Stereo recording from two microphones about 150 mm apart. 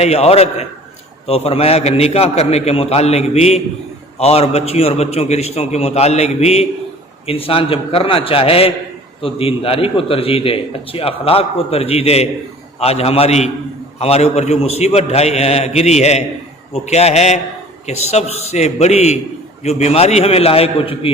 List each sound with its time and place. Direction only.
0.0 s a man's voice: 45° left (ahead or behind)